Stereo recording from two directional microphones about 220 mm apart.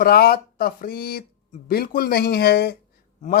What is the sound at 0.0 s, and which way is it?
Speech, 45° left (ahead or behind).